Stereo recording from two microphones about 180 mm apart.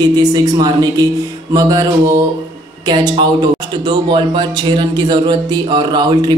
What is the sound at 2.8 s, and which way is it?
A woman's voice, 25° right (ahead or behind).